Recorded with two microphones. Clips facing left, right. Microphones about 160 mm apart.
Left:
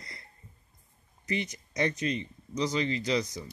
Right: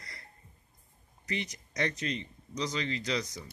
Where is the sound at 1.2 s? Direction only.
25° left (ahead or behind).